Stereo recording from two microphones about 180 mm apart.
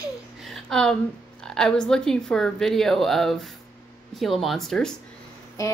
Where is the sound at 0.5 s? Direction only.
Centre (ahead or behind).